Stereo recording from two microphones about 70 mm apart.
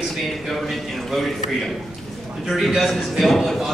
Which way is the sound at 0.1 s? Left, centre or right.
Centre.